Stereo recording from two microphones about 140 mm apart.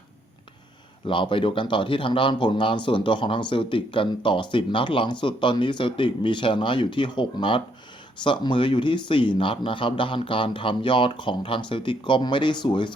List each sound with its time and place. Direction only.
1.0 s speech: 35° left (ahead or behind)